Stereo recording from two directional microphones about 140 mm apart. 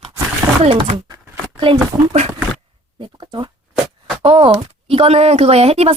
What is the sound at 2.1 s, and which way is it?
A woman's voice, 45° right (ahead or behind).